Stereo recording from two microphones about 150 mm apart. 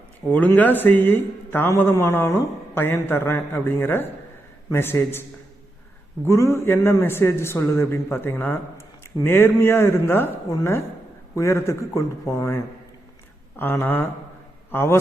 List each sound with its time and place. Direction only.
0.3 s a man's voice: 10° left (ahead or behind)
6.2 s a man's voice: 20° left (ahead or behind)